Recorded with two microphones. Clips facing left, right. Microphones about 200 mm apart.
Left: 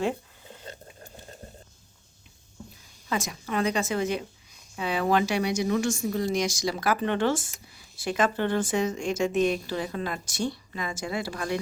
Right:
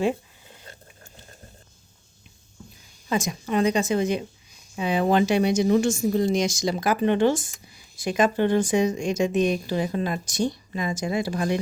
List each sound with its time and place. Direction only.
3.1 s a woman's voice: 20° right (ahead or behind)